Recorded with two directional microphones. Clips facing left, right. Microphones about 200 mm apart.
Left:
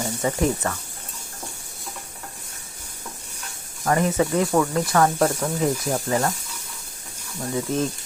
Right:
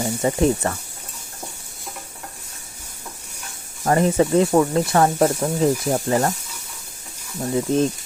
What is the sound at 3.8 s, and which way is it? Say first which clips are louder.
Speech: right 3 dB; 30° right (ahead or behind).